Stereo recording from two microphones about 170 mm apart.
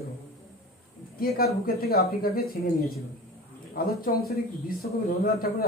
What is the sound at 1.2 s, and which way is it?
A man's voice, 65° left (ahead or behind).